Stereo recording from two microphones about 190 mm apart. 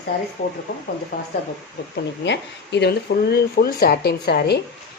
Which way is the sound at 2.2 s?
65° left (ahead or behind).